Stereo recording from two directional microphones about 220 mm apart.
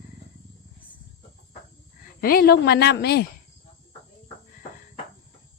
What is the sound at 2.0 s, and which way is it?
A woman's voice, 40° left (ahead or behind).